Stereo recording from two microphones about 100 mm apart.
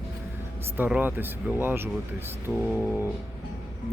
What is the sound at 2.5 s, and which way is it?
Music, 5° left (ahead or behind).